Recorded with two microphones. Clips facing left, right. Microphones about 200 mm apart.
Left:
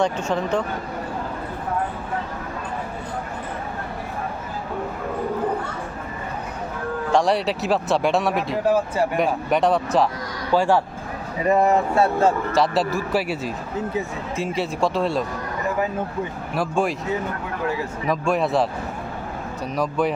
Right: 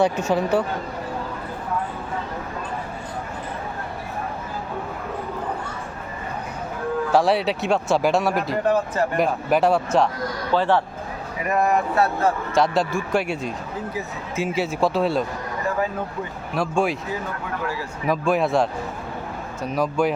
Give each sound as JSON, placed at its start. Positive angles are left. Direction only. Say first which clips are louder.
{"t": 0.0, "sound": "speech", "louder": "right 2 dB", "side_deg": -5}
{"t": 7.1, "sound": "speech", "louder": "even", "side_deg": 0}
{"t": 10.5, "sound": "speech", "louder": "left 2 dB", "side_deg": 10}
{"t": 11.4, "sound": "speech", "louder": "left 3 dB", "side_deg": 30}
{"t": 12.5, "sound": "speech", "louder": "even", "side_deg": 0}
{"t": 16.6, "sound": "speech", "louder": "even", "side_deg": 0}
{"t": 18.1, "sound": "speech", "louder": "right 1 dB", "side_deg": 0}